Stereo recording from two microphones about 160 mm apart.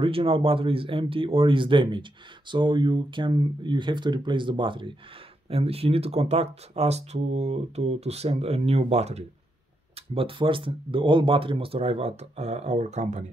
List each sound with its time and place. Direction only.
0.0 s speech: 35° right (ahead or behind)